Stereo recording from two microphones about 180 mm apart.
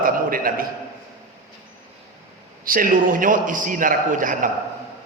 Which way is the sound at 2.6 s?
50° right (ahead or behind).